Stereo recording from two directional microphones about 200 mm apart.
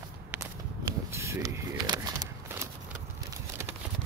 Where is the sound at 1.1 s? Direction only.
15° right (ahead or behind).